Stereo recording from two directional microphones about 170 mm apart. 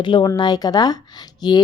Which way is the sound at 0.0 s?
30° left (ahead or behind).